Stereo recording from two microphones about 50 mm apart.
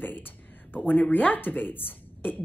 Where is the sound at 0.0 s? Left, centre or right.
Left.